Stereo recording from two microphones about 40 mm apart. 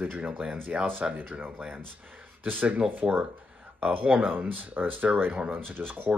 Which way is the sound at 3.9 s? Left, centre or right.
Right.